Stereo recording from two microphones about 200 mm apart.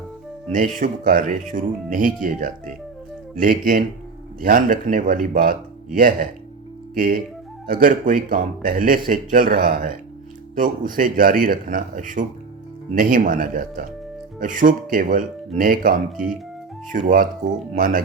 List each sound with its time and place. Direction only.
0.5 s speech: 40° right (ahead or behind)